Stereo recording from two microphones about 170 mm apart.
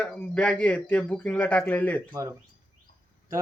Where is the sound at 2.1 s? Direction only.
15° right (ahead or behind).